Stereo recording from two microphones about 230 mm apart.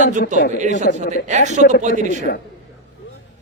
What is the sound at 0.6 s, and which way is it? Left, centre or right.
A man's voice, right.